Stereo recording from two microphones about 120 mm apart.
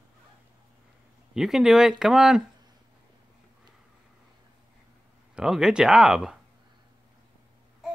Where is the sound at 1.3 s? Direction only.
5° right (ahead or behind).